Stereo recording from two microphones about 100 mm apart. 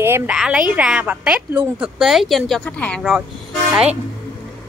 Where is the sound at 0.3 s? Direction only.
10° right (ahead or behind).